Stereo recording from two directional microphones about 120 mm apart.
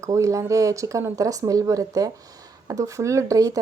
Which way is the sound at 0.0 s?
25° right (ahead or behind).